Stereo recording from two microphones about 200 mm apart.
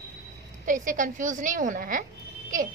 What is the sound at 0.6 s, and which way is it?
A woman's voice, 40° right (ahead or behind).